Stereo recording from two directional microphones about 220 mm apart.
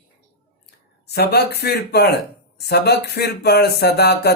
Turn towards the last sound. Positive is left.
turn(degrees=50)  # may be behind; listen again after turning